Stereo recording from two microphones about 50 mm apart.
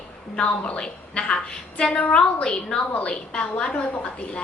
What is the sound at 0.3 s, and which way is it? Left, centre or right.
A woman's voice, left.